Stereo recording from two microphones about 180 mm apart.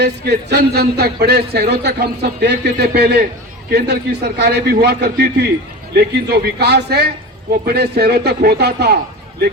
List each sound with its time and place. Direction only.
0.0 s a man's voice: 65° right (ahead or behind)